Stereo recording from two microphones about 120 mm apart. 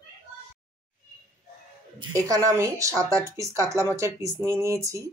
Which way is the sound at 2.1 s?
30° right (ahead or behind).